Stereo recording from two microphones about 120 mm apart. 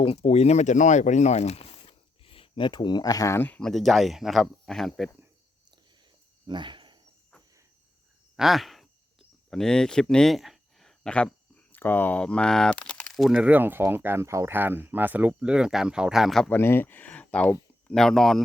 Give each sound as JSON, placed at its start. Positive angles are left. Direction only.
{"t": 0.0, "sound": "speech", "side_deg": 55}
{"t": 3.6, "sound": "speech", "side_deg": 0}
{"t": 6.5, "sound": "cricket", "side_deg": -40}
{"t": 8.4, "sound": "speech", "side_deg": 0}
{"t": 13.4, "sound": "speech", "side_deg": -15}
{"t": 16.5, "sound": "speech", "side_deg": 20}